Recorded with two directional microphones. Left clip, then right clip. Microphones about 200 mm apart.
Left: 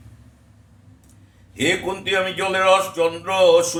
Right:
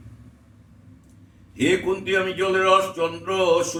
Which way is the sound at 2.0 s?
25° left (ahead or behind).